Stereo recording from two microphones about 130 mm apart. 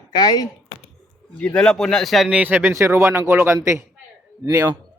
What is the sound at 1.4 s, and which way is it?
Speech, 10° left (ahead or behind).